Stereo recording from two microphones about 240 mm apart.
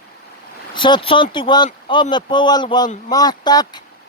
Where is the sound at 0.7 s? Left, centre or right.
Centre.